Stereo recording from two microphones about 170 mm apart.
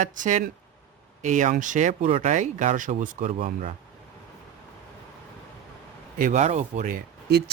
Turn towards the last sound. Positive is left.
turn(degrees=-70)  # may be behind; listen again after turning